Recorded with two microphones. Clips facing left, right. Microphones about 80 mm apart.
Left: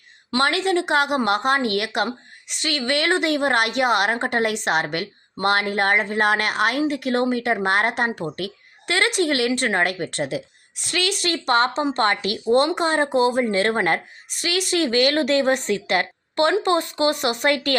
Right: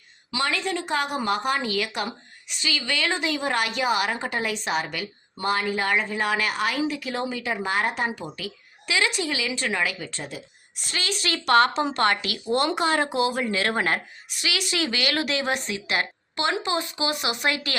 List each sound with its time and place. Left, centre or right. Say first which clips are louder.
0.3 s a woman's voice: left 6 dB; left
10.9 s a woman's voice: left 6 dB; left
11.4 s a woman's voice: right 1 dB; left